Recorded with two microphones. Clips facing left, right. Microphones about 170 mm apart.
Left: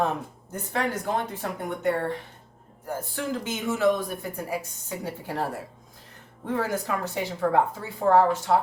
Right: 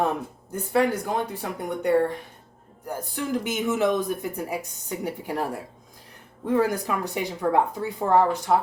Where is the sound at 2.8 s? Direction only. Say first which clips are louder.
Right 1 dB; 15° right (ahead or behind).